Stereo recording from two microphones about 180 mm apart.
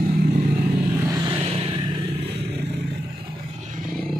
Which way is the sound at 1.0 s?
20° right (ahead or behind).